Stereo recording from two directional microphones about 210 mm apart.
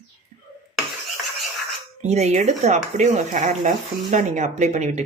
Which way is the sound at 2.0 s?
30° right (ahead or behind).